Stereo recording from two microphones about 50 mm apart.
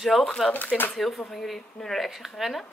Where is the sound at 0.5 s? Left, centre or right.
Left.